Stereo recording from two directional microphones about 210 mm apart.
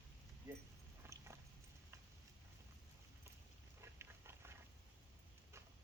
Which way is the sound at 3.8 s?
10° right (ahead or behind).